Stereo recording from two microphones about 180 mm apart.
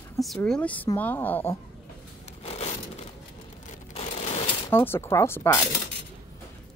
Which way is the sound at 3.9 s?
35° left (ahead or behind).